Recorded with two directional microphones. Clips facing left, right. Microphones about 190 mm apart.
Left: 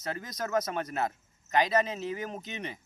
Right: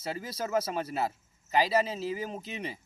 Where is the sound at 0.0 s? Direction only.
5° right (ahead or behind).